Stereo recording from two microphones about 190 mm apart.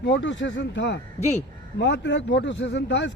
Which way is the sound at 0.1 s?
75° left (ahead or behind).